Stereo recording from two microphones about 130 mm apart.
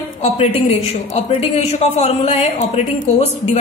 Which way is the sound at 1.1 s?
50° left (ahead or behind).